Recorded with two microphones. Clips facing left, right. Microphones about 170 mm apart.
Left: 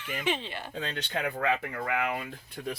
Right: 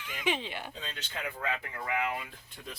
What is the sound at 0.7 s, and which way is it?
Speech, 65° left (ahead or behind).